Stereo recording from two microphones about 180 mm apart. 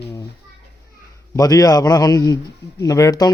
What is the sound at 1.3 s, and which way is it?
A man's voice, 20° left (ahead or behind).